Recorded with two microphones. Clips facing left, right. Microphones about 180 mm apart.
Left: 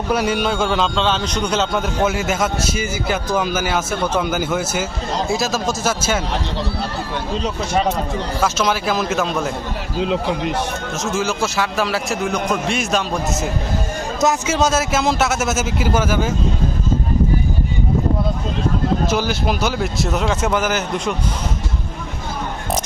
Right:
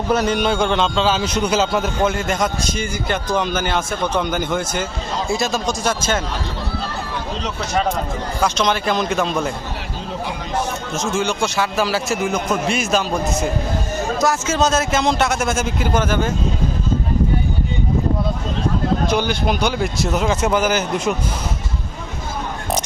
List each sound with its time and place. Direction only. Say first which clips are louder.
0.1 s a man's voice: right 1 dB; 10° left (ahead or behind)
8.4 s a man's voice: right 1 dB; 5° left (ahead or behind)
10.0 s speech: left 10 dB; 75° left (ahead or behind)
10.9 s a man's voice: right 1 dB; centre (ahead or behind)
14.2 s a man's voice: left 3 dB; 20° left (ahead or behind)
14.5 s a man's voice: even; 10° left (ahead or behind)
19.0 s a man's voice: even; 5° left (ahead or behind)